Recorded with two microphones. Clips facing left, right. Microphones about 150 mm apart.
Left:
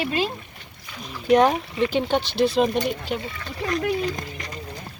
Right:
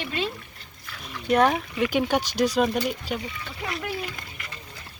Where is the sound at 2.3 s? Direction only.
40° right (ahead or behind).